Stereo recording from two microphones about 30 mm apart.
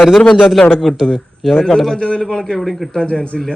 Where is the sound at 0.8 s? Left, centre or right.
Centre.